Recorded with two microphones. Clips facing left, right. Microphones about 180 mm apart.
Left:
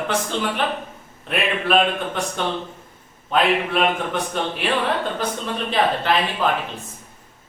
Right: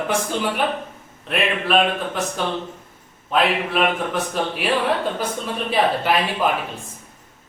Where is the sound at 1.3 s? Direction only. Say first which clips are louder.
Even; centre (ahead or behind).